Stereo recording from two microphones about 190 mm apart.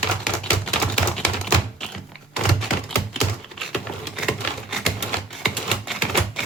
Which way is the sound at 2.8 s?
Centre (ahead or behind).